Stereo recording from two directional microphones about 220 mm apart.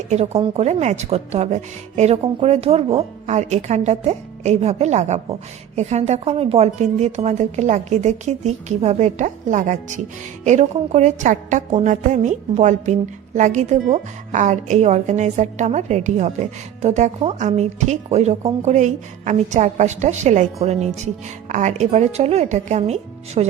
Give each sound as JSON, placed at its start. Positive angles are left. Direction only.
{"t": 0.1, "sound": "a woman's voice", "side_deg": -30}